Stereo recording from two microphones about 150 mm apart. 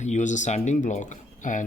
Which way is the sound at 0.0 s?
50° left (ahead or behind).